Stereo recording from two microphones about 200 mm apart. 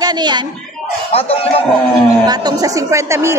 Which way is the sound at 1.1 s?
30° left (ahead or behind).